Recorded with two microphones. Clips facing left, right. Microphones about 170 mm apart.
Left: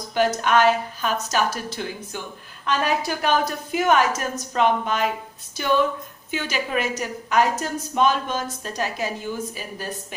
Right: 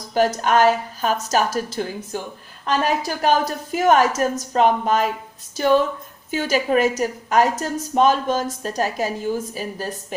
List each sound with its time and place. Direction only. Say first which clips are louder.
0.4 s a woman's voice: right 2 dB; 40° right (ahead or behind)